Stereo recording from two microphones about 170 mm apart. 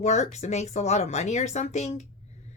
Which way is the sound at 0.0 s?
40° left (ahead or behind).